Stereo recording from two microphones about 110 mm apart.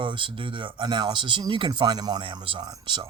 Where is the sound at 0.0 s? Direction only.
50° right (ahead or behind).